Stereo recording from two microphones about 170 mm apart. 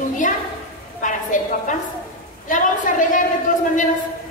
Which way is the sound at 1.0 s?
50° left (ahead or behind).